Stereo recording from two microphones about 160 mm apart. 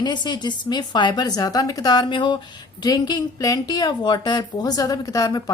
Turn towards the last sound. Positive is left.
turn(degrees=25)  # may be behind; listen again after turning